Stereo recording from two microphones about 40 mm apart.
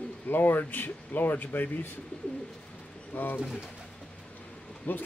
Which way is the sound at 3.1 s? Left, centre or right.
Left.